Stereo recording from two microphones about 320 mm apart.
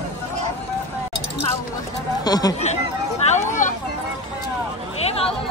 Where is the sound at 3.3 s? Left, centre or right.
Left.